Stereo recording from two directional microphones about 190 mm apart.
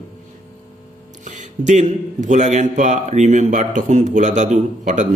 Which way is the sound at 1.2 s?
40° right (ahead or behind).